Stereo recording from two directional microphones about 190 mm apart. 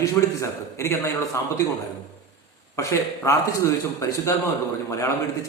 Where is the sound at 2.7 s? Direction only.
15° left (ahead or behind).